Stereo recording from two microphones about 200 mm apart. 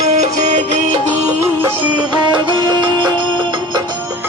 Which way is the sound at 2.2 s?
25° right (ahead or behind).